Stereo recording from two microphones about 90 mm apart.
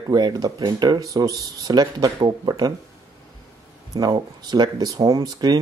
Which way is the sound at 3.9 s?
50° right (ahead or behind).